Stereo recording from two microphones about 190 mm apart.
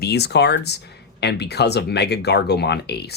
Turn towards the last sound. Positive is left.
turn(degrees=60)  # may be behind; listen again after turning